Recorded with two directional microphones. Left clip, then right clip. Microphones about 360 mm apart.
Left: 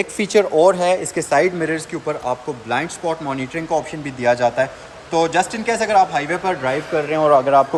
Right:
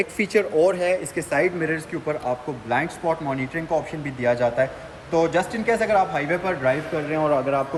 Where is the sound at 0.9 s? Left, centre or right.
Centre.